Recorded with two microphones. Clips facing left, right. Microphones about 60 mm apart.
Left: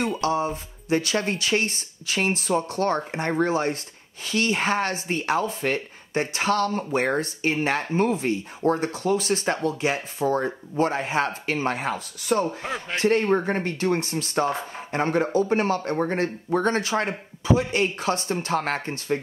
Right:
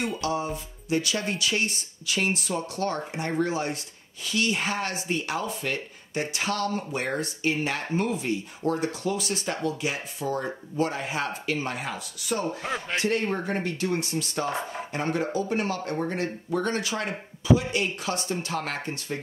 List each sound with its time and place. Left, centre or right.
0.2 s speech: left
12.4 s speech: centre
13.0 s speech: left